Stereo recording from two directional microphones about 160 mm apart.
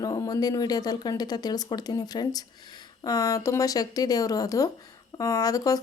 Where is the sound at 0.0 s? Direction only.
20° left (ahead or behind).